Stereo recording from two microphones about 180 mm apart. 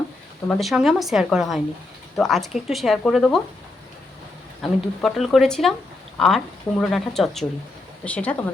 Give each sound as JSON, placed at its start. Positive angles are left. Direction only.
{"t": 0.4, "sound": "speech", "side_deg": 0}
{"t": 4.6, "sound": "speech", "side_deg": 0}